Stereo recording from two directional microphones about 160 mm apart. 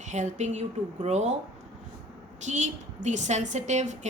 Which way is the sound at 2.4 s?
45° right (ahead or behind).